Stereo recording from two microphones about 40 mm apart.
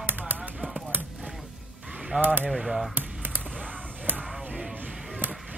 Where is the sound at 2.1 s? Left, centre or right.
Right.